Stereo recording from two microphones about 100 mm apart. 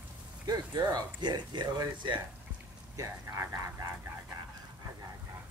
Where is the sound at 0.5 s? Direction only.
40° right (ahead or behind).